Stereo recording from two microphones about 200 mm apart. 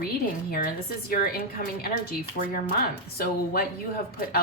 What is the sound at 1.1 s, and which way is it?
Speech, 50° left (ahead or behind).